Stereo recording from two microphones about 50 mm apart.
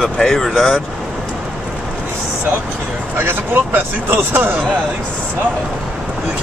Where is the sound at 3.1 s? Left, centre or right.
Right.